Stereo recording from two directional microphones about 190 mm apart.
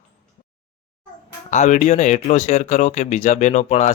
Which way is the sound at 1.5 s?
40° left (ahead or behind).